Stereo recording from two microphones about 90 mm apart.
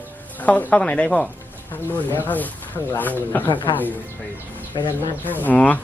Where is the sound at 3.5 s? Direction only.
60° left (ahead or behind).